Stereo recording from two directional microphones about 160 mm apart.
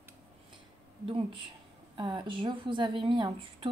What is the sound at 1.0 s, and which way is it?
A woman's voice, 35° right (ahead or behind).